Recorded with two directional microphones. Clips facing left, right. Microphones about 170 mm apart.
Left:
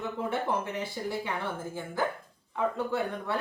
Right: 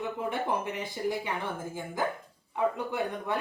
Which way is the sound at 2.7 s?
15° right (ahead or behind).